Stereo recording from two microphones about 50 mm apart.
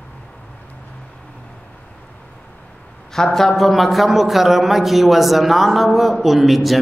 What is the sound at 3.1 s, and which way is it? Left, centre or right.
A man's voice, centre.